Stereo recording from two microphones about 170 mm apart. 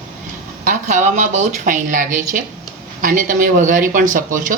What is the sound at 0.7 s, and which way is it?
Speech, 45° right (ahead or behind).